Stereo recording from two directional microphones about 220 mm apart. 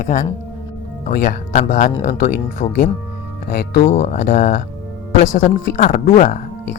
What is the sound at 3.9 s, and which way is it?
A man's voice, 30° left (ahead or behind).